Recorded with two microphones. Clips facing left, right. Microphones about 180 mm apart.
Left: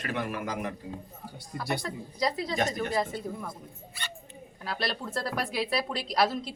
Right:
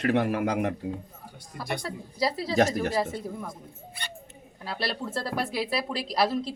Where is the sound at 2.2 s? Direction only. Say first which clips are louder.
Right 1 dB; 5° right (ahead or behind).